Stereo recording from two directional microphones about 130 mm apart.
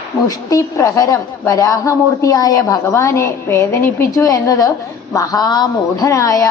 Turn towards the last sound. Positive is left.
turn(degrees=25)  # may be behind; listen again after turning